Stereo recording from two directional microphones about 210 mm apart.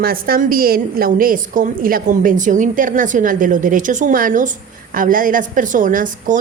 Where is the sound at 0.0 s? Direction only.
45° right (ahead or behind).